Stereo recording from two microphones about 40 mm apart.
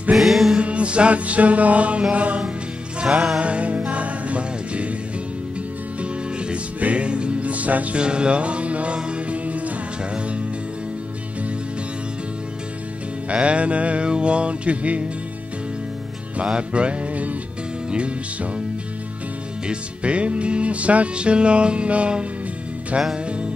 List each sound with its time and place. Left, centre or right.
0.2 s music: centre
0.6 s music: right
3.0 s music: right
6.8 s music: right
8.0 s music: right
13.3 s music: right
16.3 s music: right
19.7 s music: right